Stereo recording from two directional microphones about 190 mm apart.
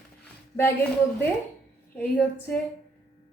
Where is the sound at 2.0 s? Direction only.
10° left (ahead or behind).